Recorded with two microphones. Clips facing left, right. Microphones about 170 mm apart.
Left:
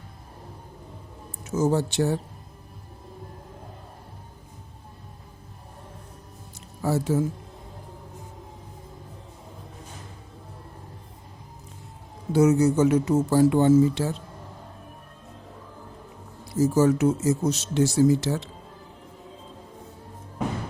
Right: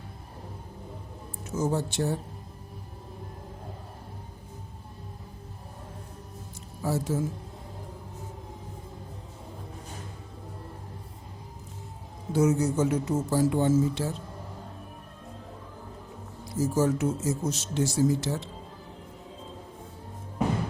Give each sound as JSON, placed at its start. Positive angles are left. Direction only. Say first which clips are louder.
{"t": 1.5, "sound": "speech", "louder": "left 5 dB", "side_deg": 80}
{"t": 6.8, "sound": "speech", "louder": "left 4 dB", "side_deg": 70}
{"t": 12.3, "sound": "speech", "louder": "left 5 dB", "side_deg": 75}
{"t": 16.6, "sound": "speech", "louder": "left 5 dB", "side_deg": 75}